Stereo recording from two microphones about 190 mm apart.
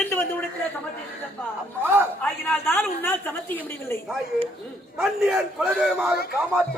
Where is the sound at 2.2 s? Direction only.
10° left (ahead or behind).